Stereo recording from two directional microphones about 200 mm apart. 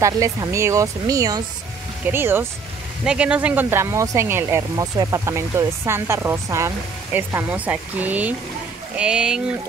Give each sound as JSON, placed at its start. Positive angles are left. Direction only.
{"t": 0.0, "sound": "speech", "side_deg": -15}